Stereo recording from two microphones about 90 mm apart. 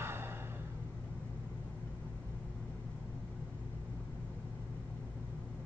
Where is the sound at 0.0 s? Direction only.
25° right (ahead or behind).